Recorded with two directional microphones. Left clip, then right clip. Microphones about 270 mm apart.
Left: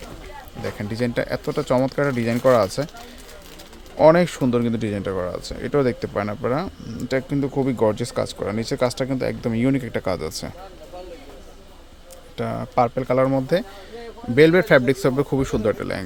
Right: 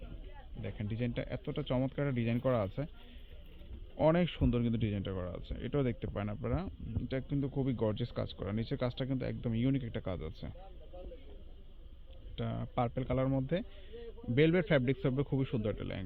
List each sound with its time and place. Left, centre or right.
0.9 s speech: left
1.2 s speech: centre
3.9 s speech: centre
12.4 s speech: centre